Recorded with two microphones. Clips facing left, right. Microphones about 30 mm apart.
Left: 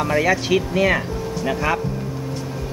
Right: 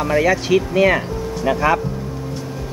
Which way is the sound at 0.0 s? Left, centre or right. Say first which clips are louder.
Right 2 dB; centre.